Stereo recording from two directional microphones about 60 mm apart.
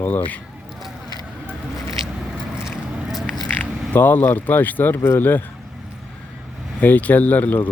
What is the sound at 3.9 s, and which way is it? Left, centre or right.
Speech, left.